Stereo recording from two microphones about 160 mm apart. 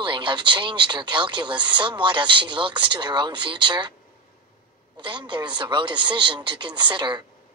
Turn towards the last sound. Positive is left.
turn(degrees=-30)  # may be behind; listen again after turning